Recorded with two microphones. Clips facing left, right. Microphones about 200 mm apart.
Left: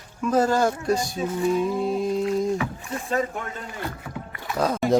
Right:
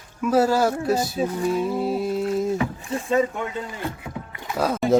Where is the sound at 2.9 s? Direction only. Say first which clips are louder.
Right 4 dB; 30° right (ahead or behind).